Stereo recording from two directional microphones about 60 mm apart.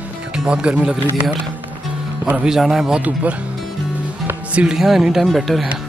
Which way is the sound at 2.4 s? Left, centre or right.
Centre.